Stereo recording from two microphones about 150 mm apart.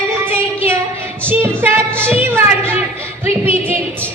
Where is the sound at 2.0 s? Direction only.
15° right (ahead or behind).